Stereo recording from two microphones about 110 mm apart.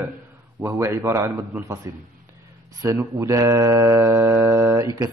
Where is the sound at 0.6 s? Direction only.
25° right (ahead or behind).